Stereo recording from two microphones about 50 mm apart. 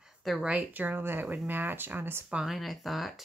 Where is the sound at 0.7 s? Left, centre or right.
Right.